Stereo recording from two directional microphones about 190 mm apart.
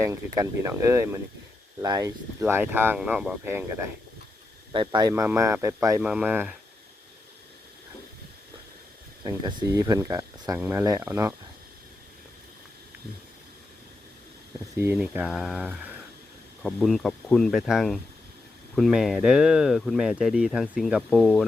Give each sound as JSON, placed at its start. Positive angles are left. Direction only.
{"t": 0.0, "sound": "speech", "side_deg": -15}
{"t": 4.7, "sound": "speech", "side_deg": -25}
{"t": 6.0, "sound": "speech", "side_deg": -5}
{"t": 9.2, "sound": "speech", "side_deg": -20}
{"t": 14.8, "sound": "speech", "side_deg": -10}